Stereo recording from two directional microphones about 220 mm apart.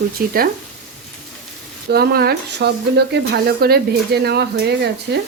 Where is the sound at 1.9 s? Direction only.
45° right (ahead or behind).